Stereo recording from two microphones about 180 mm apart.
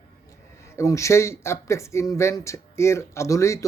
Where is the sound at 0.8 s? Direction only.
15° left (ahead or behind).